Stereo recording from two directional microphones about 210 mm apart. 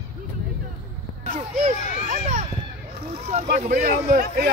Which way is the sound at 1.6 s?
35° right (ahead or behind).